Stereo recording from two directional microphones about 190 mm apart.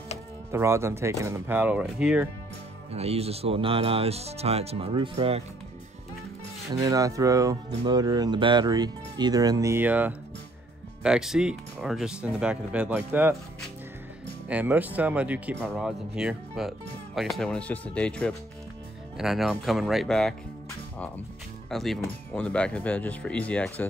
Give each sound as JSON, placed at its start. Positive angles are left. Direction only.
{"t": 0.5, "sound": "speech", "side_deg": -15}
{"t": 2.9, "sound": "speech", "side_deg": -30}
{"t": 6.7, "sound": "speech", "side_deg": -20}
{"t": 14.5, "sound": "speech", "side_deg": -10}
{"t": 21.6, "sound": "speech", "side_deg": 0}